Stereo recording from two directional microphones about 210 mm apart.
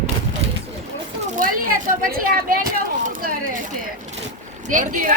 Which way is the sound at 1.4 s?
40° right (ahead or behind).